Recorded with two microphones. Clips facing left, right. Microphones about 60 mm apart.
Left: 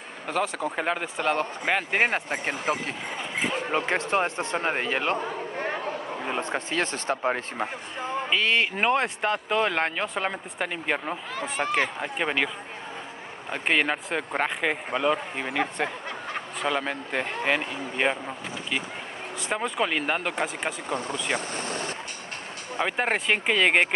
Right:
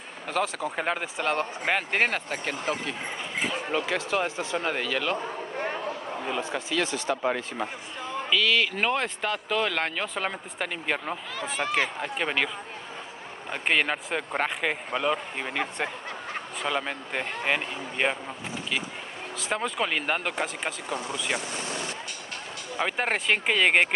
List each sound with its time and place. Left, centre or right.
0.3 s speech: centre; by 5.1 s left
6.3 s speech: left
8.3 s speech: left
8.8 s speech: centre
11.3 s speech: left
12.0 s speech: centre
13.5 s speech: centre
16.6 s speech: centre
19.5 s speech: centre
20.9 s speech: left
22.8 s speech: centre